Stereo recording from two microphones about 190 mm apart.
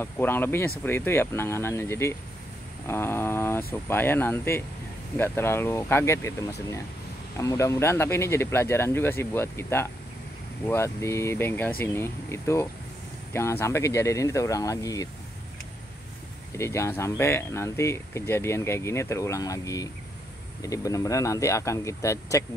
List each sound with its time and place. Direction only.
0.0 s speech: 10° left (ahead or behind)
16.5 s speech: 15° left (ahead or behind)